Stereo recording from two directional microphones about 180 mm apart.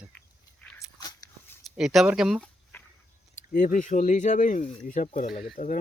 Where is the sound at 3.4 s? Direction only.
45° left (ahead or behind).